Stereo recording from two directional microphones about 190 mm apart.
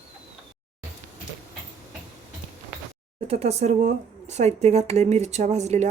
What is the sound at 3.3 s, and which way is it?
Speech, 35° right (ahead or behind).